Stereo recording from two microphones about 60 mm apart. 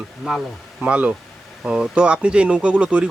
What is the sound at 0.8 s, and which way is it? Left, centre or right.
Speech, right.